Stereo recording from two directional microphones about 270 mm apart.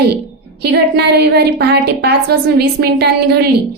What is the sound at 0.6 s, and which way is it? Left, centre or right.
A woman's voice, right.